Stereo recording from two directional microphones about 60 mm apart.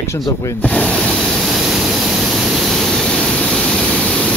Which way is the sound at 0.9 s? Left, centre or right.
Centre.